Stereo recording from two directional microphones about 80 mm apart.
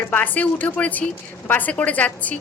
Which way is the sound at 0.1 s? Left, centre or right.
Centre.